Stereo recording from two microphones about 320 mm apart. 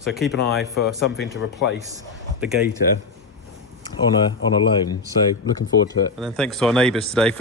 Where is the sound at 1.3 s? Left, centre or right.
Left.